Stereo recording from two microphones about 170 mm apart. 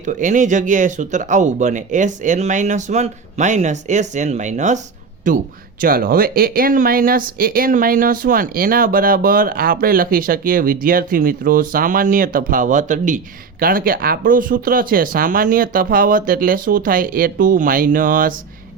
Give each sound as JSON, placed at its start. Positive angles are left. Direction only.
{"t": 0.0, "sound": "speech", "side_deg": -45}